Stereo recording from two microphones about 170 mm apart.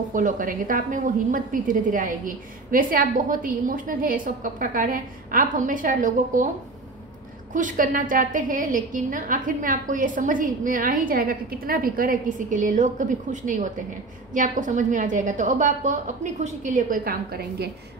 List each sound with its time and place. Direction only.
0.1 s a woman's voice: 50° right (ahead or behind)
7.5 s a woman's voice: 50° right (ahead or behind)